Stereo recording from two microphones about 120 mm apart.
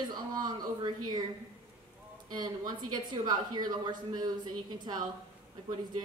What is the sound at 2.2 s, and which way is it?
Speech, 35° right (ahead or behind).